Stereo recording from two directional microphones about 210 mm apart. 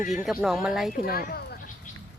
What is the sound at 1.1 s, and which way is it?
Speech, 45° left (ahead or behind).